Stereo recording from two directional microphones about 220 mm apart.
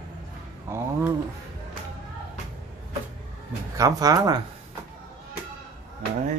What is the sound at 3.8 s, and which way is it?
Speech, 15° right (ahead or behind).